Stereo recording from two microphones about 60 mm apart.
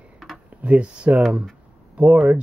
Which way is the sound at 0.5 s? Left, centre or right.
Right.